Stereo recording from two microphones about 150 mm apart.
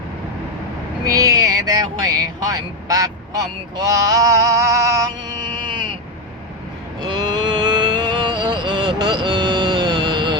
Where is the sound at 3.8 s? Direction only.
25° right (ahead or behind).